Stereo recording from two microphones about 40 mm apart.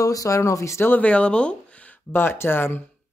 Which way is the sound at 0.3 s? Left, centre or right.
Left.